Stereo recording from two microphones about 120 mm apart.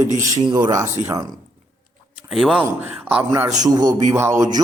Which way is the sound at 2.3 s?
5° right (ahead or behind).